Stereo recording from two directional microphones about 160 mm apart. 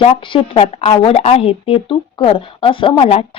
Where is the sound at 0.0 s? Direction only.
35° left (ahead or behind).